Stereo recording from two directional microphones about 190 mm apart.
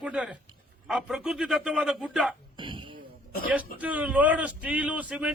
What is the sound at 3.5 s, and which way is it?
A man's voice, 10° right (ahead or behind).